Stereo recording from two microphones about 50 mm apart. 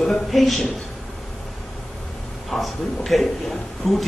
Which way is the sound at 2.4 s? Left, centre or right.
Centre.